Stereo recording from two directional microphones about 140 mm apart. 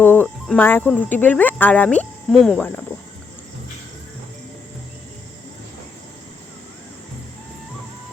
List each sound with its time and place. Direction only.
0.0 s cricket: 15° left (ahead or behind)
0.6 s speech: 15° left (ahead or behind)